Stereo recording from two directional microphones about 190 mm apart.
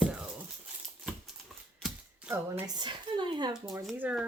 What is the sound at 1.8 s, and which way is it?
Speech, 10° right (ahead or behind).